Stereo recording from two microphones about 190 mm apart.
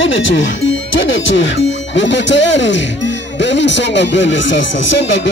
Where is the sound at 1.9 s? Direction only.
70° left (ahead or behind).